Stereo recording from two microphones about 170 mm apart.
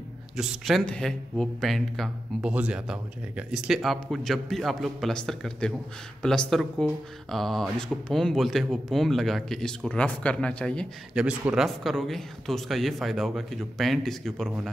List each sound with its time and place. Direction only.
0.4 s speech: 5° right (ahead or behind)
11.1 s speech: 5° right (ahead or behind)